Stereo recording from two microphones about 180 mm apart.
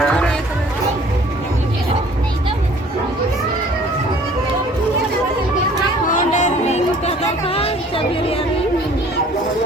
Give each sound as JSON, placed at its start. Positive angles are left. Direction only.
{"t": 0.0, "sound": "music", "side_deg": 5}
{"t": 6.1, "sound": "music", "side_deg": 45}